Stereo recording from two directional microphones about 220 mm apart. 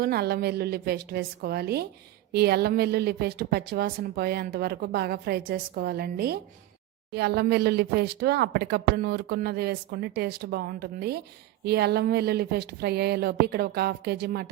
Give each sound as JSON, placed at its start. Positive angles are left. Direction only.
{"t": 0.0, "sound": "speech", "side_deg": -45}